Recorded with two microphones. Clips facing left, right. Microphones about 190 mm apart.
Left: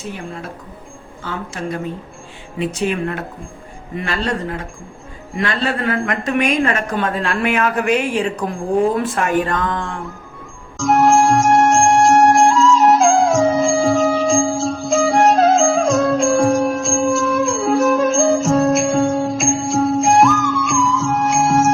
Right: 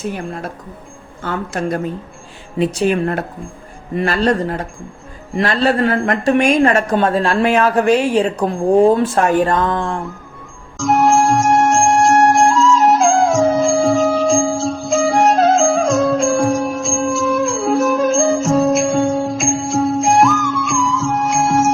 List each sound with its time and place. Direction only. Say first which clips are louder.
0.1 s a woman's voice: right 4 dB; 50° right (ahead or behind)
2.6 s speech: right 4 dB; 35° right (ahead or behind)
10.8 s music: even; centre (ahead or behind)